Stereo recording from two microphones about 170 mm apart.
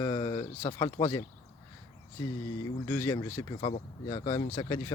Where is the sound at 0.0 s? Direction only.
25° left (ahead or behind).